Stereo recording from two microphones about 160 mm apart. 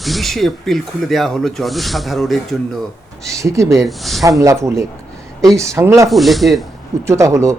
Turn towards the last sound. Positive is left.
turn(degrees=-20)  # may be behind; listen again after turning